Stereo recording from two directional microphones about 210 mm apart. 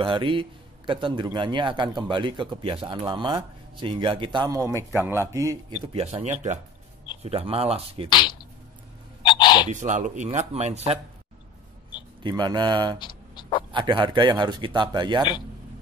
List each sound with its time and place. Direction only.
0.0 s a man's voice: 25° right (ahead or behind)
5.9 s a man's voice: 30° right (ahead or behind)
8.1 s speech: 20° left (ahead or behind)
9.2 s a sound: 20° left (ahead or behind)
9.7 s speech: 35° right (ahead or behind)
12.2 s a man's voice: 20° right (ahead or behind)
13.0 s a sound: 20° left (ahead or behind)
13.7 s a man's voice: 25° right (ahead or behind)